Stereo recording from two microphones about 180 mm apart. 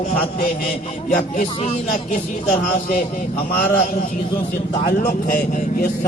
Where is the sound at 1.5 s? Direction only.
35° left (ahead or behind).